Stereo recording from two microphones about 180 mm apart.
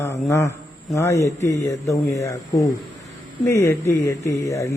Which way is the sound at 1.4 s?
15° left (ahead or behind).